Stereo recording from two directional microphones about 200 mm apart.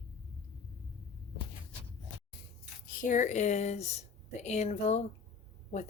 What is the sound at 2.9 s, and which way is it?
Speech, 40° left (ahead or behind).